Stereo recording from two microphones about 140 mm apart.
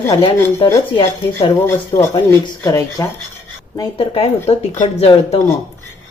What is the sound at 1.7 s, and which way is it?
A woman's voice, 15° left (ahead or behind).